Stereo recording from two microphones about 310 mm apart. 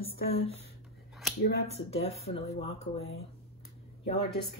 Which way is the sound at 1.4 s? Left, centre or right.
Left.